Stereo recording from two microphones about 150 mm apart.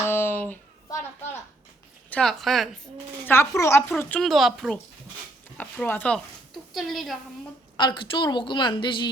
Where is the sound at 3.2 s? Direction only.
15° left (ahead or behind).